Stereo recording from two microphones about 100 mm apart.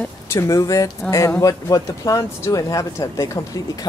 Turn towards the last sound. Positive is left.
turn(degrees=30)  # may be behind; listen again after turning